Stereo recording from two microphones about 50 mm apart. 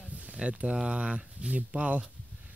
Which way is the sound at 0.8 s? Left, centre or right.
Right.